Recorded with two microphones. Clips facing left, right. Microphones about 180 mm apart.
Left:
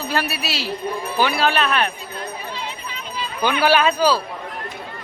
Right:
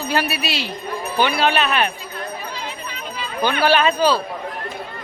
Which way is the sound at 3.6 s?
10° left (ahead or behind).